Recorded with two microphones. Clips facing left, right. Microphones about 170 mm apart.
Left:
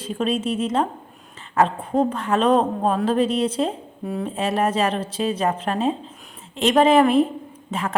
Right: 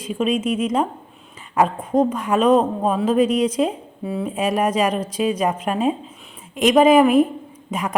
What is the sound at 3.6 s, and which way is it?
Speech, 5° right (ahead or behind).